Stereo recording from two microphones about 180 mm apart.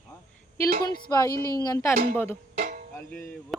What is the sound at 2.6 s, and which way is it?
Music, 50° right (ahead or behind).